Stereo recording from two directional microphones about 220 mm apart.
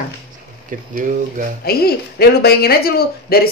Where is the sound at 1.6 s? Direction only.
45° left (ahead or behind).